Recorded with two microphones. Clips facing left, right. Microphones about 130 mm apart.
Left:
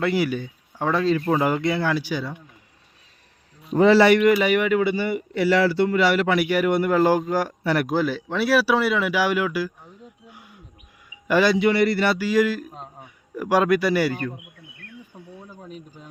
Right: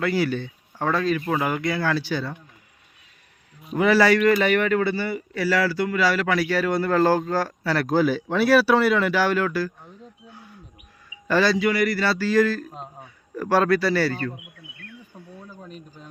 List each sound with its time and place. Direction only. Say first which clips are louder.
0.0 s speech: left 1 dB; 20° left (ahead or behind)
3.6 s speech: left 3 dB; 30° left (ahead or behind)
7.9 s a man's voice: right 3 dB; centre (ahead or behind); by 14.3 s 15° left (ahead or behind)
15.3 s a sound: even; 20° left (ahead or behind)